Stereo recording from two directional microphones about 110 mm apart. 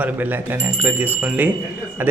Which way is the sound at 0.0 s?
15° right (ahead or behind).